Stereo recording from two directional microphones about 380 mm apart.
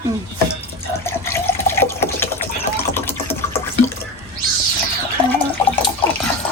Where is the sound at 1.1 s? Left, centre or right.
Centre.